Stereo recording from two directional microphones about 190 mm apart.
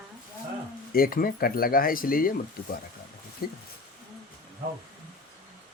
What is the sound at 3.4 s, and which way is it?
Speech, 50° left (ahead or behind).